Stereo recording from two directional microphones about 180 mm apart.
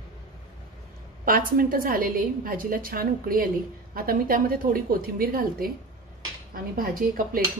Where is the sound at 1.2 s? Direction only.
50° right (ahead or behind).